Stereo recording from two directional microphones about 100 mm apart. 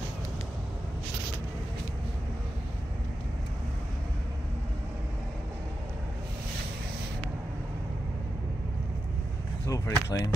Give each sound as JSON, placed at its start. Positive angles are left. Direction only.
{"t": 9.7, "sound": "speech", "side_deg": 30}